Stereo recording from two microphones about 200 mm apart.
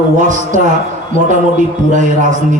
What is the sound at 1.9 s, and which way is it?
Speech, 40° right (ahead or behind).